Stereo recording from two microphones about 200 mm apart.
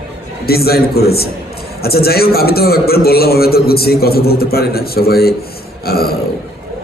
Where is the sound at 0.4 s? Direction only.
50° left (ahead or behind).